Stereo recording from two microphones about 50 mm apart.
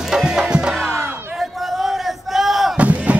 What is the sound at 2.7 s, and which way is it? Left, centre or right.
Slam, right.